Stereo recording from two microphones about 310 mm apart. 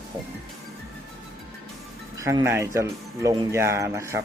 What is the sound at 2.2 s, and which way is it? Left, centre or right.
Speech, centre.